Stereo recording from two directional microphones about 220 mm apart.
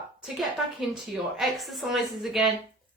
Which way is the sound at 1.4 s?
Centre (ahead or behind).